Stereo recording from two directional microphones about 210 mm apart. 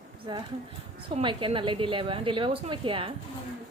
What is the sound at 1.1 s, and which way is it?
A woman's voice, 25° right (ahead or behind).